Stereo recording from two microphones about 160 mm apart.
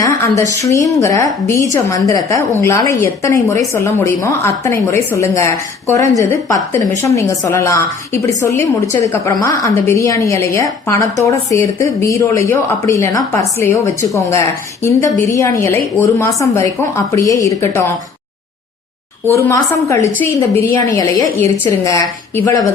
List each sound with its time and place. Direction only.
0.0 s a woman's voice: 20° left (ahead or behind)
15.6 s speech: 15° left (ahead or behind)
19.3 s a woman's voice: 15° left (ahead or behind)